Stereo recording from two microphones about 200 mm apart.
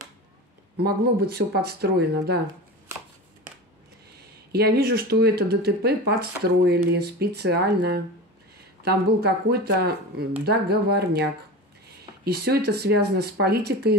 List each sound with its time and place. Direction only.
0.7 s speech: 50° right (ahead or behind)
2.9 s shuffling cards: 15° right (ahead or behind)
4.5 s speech: 50° right (ahead or behind)
8.8 s speech: 55° right (ahead or behind)
12.3 s speech: 50° right (ahead or behind)